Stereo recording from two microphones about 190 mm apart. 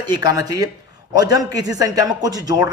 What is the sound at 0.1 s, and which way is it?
A man's voice, 20° right (ahead or behind).